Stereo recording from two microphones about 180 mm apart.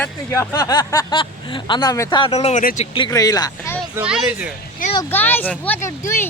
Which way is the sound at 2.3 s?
40° left (ahead or behind).